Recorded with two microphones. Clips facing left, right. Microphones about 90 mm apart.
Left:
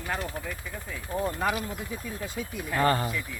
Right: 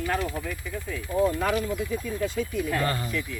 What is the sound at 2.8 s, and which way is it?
Speech, 35° left (ahead or behind).